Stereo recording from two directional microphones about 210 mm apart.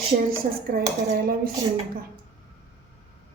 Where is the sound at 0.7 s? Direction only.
45° right (ahead or behind).